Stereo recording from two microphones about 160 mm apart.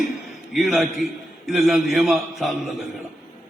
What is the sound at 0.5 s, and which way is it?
A man's voice, centre (ahead or behind).